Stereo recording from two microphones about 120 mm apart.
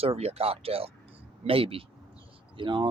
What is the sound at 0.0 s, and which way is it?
A man's voice, 55° right (ahead or behind).